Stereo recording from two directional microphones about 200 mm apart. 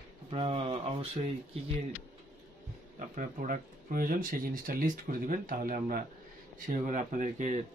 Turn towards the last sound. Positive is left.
turn(degrees=-40)  # may be behind; listen again after turning